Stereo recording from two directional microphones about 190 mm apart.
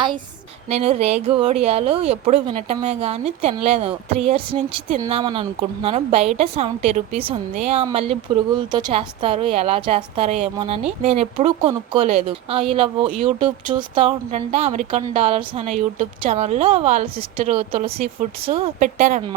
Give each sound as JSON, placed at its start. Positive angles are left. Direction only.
{"t": 0.7, "sound": "a woman's voice", "side_deg": -35}